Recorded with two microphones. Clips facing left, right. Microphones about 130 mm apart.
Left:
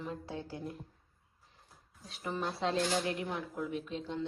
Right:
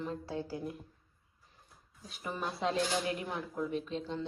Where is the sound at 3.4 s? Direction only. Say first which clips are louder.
Right 1 dB; centre (ahead or behind).